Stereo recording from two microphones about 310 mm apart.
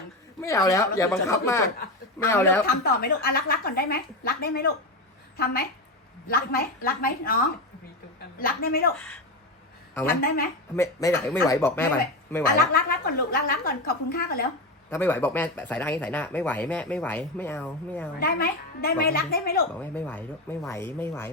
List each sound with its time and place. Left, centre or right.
0.4 s speech: centre
2.6 s a woman's voice: left
6.2 s a woman's voice: left
8.4 s a woman's voice: left
9.0 s speech: centre
10.2 s a woman's voice: left
10.8 s speech: centre
12.4 s a woman's voice: left
14.8 s speech: centre
18.2 s a woman's voice: left
19.8 s speech: centre